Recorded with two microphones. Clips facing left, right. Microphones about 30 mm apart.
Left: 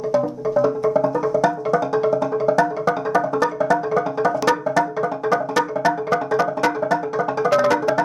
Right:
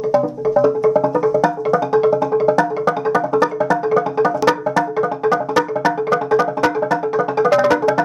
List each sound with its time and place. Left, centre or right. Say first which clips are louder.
0.1 s music: right 3 dB; centre
2.5 s music: right 2 dB; centre